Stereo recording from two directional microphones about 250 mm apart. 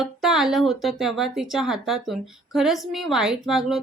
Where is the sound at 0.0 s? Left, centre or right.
Centre.